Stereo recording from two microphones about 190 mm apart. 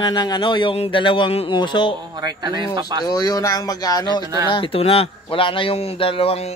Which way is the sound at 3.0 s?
20° left (ahead or behind).